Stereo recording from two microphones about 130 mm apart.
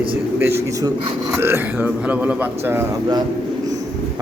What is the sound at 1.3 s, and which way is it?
Speech, 20° right (ahead or behind).